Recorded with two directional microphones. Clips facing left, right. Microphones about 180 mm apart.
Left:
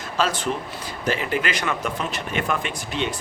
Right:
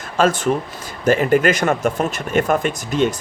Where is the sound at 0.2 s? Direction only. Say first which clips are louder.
Right 7 dB; 50° right (ahead or behind).